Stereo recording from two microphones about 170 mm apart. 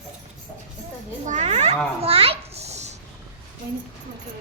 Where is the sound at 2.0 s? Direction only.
35° right (ahead or behind).